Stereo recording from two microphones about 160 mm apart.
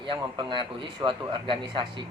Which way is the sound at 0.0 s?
30° right (ahead or behind).